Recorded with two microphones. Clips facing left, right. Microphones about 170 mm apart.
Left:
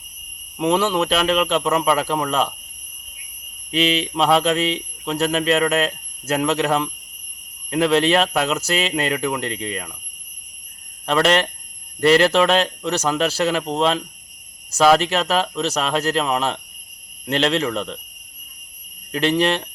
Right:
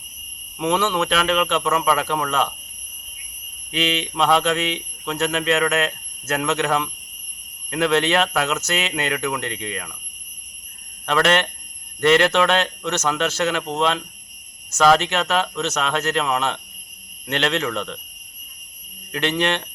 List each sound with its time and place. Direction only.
0.6 s speech: 35° left (ahead or behind)
3.7 s speech: 35° left (ahead or behind)
4.1 s mantra: centre (ahead or behind)
4.4 s speech: 35° left (ahead or behind)
11.0 s speech: 35° left (ahead or behind)
19.1 s speech: 35° left (ahead or behind)